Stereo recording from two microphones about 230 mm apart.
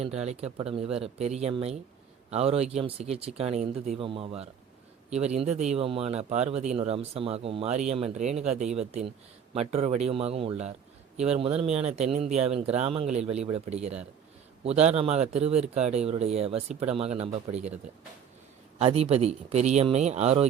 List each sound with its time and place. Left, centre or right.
0.0 s speech: right
18.8 s speech: right